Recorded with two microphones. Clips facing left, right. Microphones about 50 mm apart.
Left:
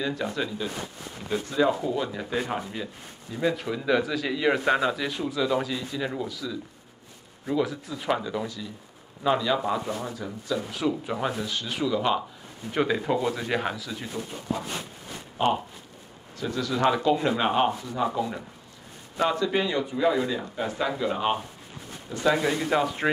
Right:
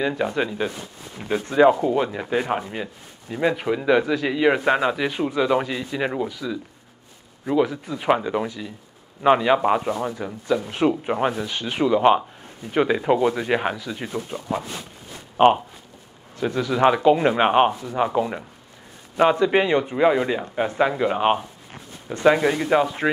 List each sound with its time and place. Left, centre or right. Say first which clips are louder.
0.2 s speech: right 6 dB; right
3.5 s speech: right 6 dB; right
4.0 s speech: right 6 dB; centre; by 6.2 s right
6.2 s speech: right 5 dB; right
7.6 s speech: right 5 dB; centre
7.9 s speech: right 7 dB; right
12.7 s speech: right 6 dB; right
13.9 s speech: right 5 dB; right
16.3 s speech: right 6 dB; right
19.4 s speech: right 7 dB; right; by 23.0 s centre